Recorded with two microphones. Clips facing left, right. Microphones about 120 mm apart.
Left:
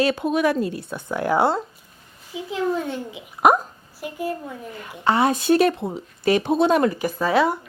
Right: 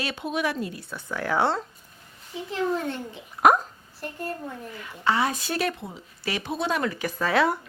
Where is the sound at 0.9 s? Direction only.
20° left (ahead or behind); by 4.5 s 5° left (ahead or behind).